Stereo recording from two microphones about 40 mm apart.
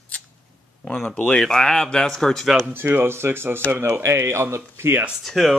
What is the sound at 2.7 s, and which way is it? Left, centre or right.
Speech, right.